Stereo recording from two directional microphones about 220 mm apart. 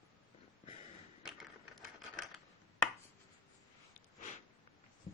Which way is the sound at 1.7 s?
Centre (ahead or behind).